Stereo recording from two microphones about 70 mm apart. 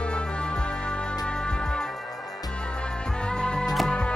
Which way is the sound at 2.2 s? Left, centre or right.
Left.